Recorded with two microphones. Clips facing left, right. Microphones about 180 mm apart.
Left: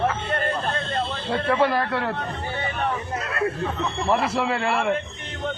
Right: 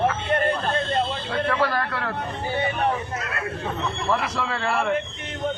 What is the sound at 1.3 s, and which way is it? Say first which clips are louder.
Speech: left 4 dB; 25° left (ahead or behind).